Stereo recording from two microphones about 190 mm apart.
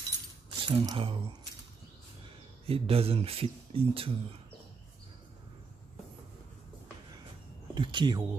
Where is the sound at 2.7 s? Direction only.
30° right (ahead or behind).